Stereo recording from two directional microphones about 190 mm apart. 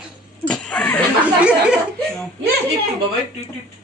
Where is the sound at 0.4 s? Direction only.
5° left (ahead or behind).